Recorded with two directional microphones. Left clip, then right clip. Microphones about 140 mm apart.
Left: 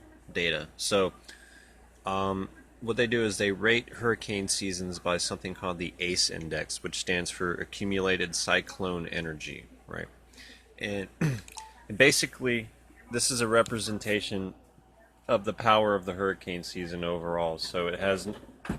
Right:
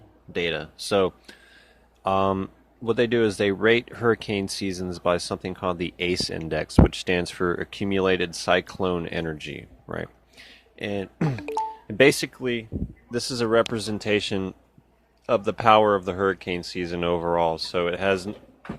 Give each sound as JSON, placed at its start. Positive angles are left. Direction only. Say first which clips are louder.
{"t": 0.3, "sound": "speech", "louder": "right 3 dB", "side_deg": -50}
{"t": 13.1, "sound": "speech", "louder": "right 3 dB", "side_deg": -50}